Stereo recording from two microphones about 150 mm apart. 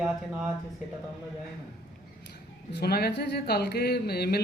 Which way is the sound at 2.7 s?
90° left.